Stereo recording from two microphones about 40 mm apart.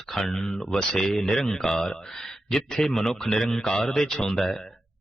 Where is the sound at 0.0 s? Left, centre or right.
Centre.